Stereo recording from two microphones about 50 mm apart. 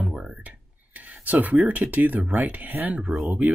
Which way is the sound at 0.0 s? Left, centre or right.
Centre.